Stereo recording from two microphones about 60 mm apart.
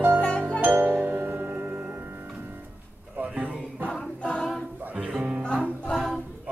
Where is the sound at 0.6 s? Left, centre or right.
Right.